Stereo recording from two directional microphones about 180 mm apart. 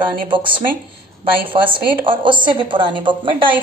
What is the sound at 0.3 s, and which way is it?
A woman's voice, 25° right (ahead or behind).